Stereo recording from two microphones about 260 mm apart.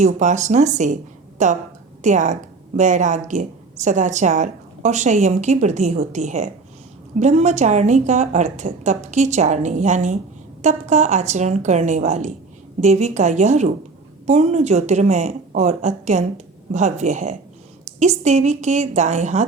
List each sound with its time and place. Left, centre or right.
0.0 s speech: right